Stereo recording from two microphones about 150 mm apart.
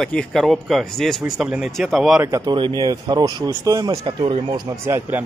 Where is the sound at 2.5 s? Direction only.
30° right (ahead or behind).